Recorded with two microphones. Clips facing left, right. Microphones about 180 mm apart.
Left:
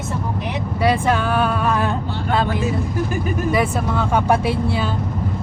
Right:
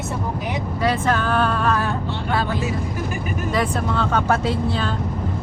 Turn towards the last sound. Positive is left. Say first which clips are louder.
# left 2 dB
turn(degrees=10)  # may be behind; listen again after turning